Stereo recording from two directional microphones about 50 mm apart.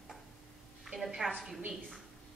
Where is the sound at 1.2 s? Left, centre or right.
Centre.